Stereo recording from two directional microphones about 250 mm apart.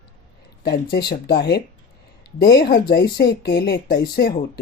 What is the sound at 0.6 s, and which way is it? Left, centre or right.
A woman's voice, left.